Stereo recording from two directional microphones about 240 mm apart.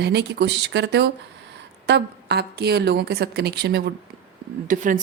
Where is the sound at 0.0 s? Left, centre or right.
Right.